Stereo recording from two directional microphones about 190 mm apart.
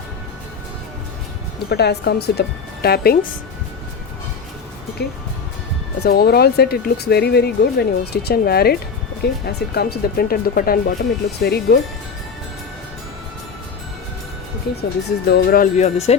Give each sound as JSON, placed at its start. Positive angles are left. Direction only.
{"t": 1.7, "sound": "speech", "side_deg": 60}
{"t": 5.0, "sound": "speech", "side_deg": 55}
{"t": 14.7, "sound": "speech", "side_deg": 60}
{"t": 15.3, "sound": "speech", "side_deg": 50}